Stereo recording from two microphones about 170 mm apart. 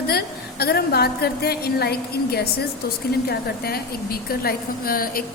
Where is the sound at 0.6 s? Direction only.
65° left (ahead or behind).